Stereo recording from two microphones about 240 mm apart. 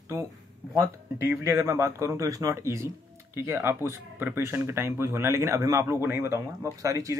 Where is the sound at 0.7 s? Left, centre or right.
Centre.